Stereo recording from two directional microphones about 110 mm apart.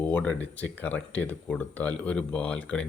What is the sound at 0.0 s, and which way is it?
Speech, 15° left (ahead or behind).